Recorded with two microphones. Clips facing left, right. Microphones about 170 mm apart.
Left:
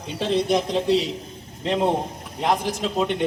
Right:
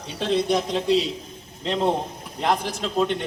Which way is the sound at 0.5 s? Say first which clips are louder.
Left 1 dB; 15° left (ahead or behind).